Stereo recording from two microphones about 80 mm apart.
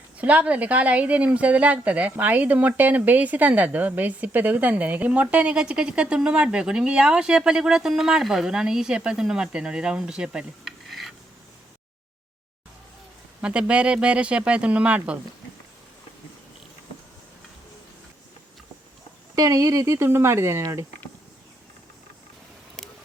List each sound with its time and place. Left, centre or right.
0.2 s speech: centre
13.4 s speech: centre
19.4 s speech: right